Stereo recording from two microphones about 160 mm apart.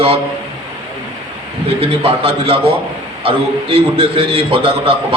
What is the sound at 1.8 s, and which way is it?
A man's voice, 35° right (ahead or behind).